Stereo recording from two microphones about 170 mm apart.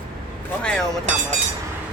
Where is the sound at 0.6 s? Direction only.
5° left (ahead or behind).